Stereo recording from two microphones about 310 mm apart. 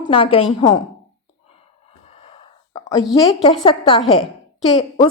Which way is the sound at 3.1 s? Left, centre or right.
Centre.